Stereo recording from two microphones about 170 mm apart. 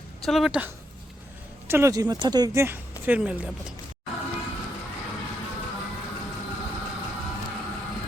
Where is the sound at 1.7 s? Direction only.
15° right (ahead or behind).